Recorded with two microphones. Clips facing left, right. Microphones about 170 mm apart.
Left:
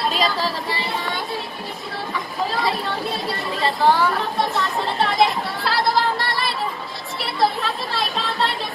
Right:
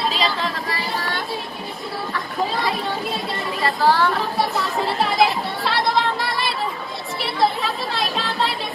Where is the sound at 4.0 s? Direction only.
Centre (ahead or behind).